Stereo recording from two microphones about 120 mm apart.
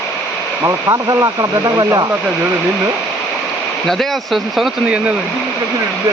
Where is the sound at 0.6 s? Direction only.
30° right (ahead or behind).